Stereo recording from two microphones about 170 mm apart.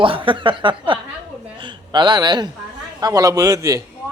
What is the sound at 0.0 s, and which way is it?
A man's voice, 30° right (ahead or behind).